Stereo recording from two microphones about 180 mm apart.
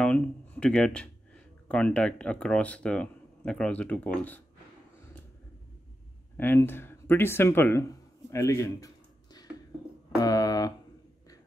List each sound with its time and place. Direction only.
0.0 s speech: 5° left (ahead or behind)
6.3 s speech: 10° left (ahead or behind)
10.2 s a sound: 20° left (ahead or behind)